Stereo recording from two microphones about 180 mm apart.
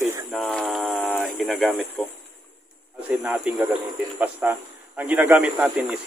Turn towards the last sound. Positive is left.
turn(degrees=-10)  # may be behind; listen again after turning